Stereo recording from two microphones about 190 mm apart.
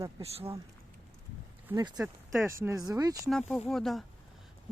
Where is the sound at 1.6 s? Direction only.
20° right (ahead or behind).